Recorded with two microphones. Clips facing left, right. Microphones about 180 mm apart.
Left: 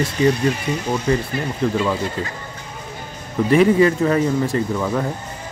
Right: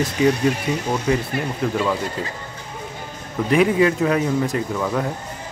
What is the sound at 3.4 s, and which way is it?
Speech, 5° right (ahead or behind).